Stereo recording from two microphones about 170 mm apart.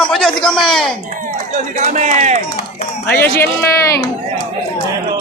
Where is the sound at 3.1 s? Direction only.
10° left (ahead or behind).